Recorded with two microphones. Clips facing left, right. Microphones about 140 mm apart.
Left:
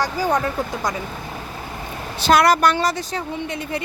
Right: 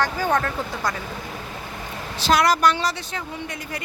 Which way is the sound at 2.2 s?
60° left (ahead or behind).